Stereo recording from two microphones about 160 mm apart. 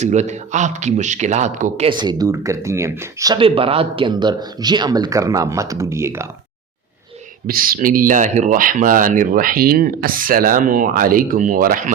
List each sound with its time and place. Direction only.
0.0 s a man's voice: 45° right (ahead or behind)
2.0 s speech: 25° right (ahead or behind)
3.3 s speech: 35° right (ahead or behind); by 6.3 s 15° right (ahead or behind)
7.4 s speech: 65° right (ahead or behind)